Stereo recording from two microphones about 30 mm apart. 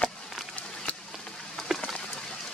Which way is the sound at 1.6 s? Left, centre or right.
Centre.